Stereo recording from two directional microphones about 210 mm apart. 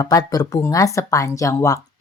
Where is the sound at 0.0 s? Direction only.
15° left (ahead or behind).